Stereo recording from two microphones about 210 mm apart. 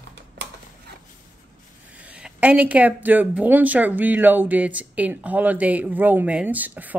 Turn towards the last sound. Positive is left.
turn(degrees=-10)  # may be behind; listen again after turning